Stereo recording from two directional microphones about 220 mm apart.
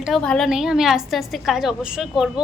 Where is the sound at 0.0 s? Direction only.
Centre (ahead or behind).